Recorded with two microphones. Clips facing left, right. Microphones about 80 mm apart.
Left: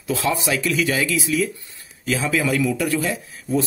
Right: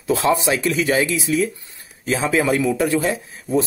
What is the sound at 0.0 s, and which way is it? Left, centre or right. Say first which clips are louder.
A man's voice: right 4 dB; right.